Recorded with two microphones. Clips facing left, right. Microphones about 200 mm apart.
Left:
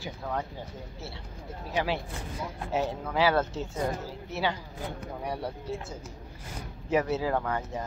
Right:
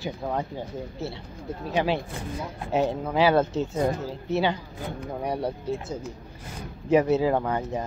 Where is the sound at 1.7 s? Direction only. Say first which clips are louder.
Right 4 dB; 25° right (ahead or behind).